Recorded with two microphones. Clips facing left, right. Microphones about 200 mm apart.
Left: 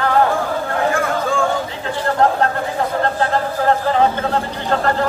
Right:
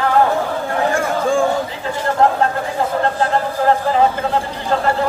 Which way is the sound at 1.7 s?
Centre (ahead or behind).